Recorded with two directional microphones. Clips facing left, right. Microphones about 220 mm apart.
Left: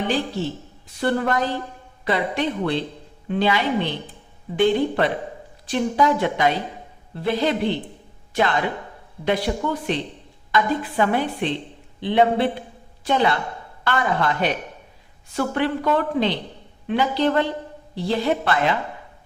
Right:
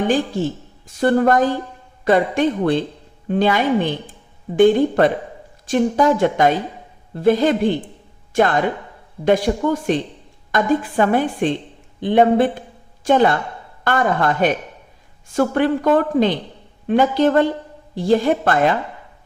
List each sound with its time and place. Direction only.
0.0 s a woman's voice: 45° right (ahead or behind)